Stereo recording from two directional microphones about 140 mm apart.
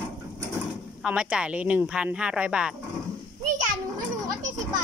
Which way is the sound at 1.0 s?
5° right (ahead or behind).